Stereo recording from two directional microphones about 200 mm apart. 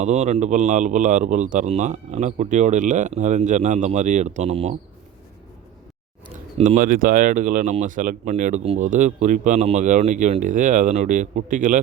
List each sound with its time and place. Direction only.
0.0 s speech: 35° right (ahead or behind)
6.6 s speech: 40° right (ahead or behind)